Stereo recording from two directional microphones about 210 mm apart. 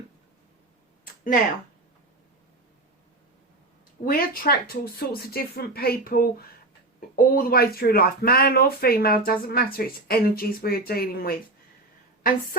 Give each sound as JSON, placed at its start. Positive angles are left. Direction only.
{"t": 4.0, "sound": "speech", "side_deg": 45}